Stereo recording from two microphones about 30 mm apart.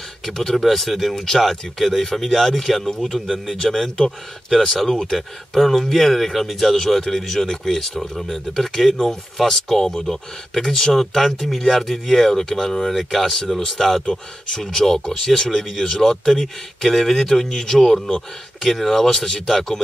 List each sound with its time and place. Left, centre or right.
0.2 s speech: centre
0.7 s speech: centre
5.6 s speech: centre
7.4 s speech: left; by 13.9 s centre
14.5 s speech: centre